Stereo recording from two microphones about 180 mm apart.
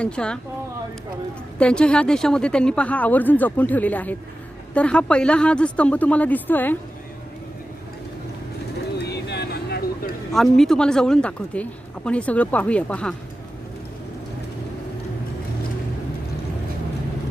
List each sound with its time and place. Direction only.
0.0 s speech: 5° left (ahead or behind)
1.5 s speech: 5° left (ahead or behind)
9.0 s a sound: 65° left (ahead or behind)
10.3 s speech: centre (ahead or behind)